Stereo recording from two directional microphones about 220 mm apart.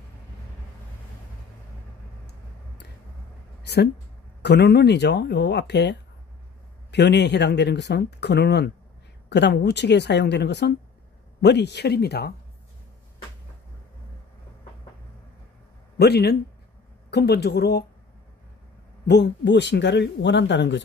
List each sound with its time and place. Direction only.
3.6 s speech: 50° left (ahead or behind)
16.0 s speech: 45° left (ahead or behind)
19.0 s speech: 50° left (ahead or behind)